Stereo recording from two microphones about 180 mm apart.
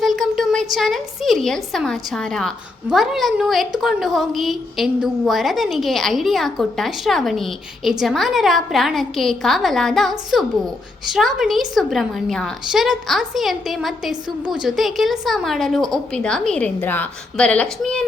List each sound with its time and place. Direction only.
0.0 s a sound: centre (ahead or behind)
0.7 s a woman's voice: centre (ahead or behind)
14.3 s a woman's voice: 25° right (ahead or behind)
14.6 s a woman's voice: centre (ahead or behind)